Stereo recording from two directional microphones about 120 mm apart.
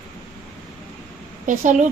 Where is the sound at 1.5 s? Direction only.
90° right.